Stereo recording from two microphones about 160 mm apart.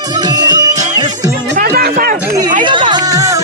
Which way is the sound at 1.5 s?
70° right (ahead or behind).